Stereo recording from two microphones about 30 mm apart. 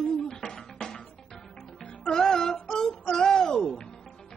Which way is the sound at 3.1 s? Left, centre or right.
Centre.